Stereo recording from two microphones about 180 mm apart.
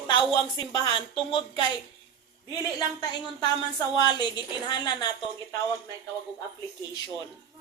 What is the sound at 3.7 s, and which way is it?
Speech, 25° left (ahead or behind).